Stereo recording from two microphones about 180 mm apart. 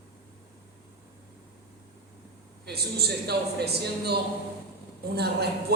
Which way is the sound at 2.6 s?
65° right (ahead or behind).